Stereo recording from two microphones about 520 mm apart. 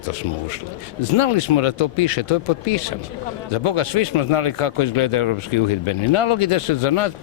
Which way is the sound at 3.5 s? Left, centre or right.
Left.